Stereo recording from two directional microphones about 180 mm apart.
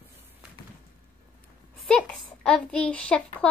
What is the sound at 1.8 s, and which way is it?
A child's voice, 5° left (ahead or behind).